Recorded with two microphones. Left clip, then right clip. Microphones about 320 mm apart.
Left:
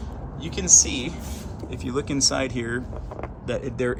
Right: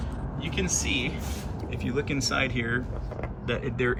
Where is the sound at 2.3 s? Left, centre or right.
Centre.